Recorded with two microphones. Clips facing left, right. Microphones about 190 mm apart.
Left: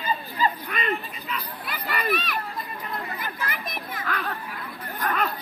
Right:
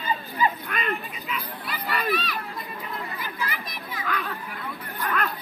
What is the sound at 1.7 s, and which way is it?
Speech, 50° left (ahead or behind).